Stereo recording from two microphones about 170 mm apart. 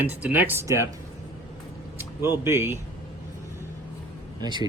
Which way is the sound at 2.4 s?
15° right (ahead or behind).